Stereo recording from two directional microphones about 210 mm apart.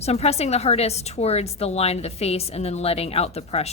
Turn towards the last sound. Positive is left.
turn(degrees=30)  # may be behind; listen again after turning